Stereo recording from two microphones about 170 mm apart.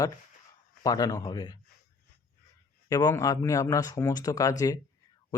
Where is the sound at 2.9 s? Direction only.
20° left (ahead or behind).